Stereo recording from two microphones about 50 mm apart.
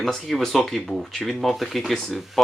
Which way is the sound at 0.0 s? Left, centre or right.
Centre.